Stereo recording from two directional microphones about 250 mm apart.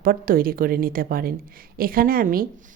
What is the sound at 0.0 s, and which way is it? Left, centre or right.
A woman's voice, right.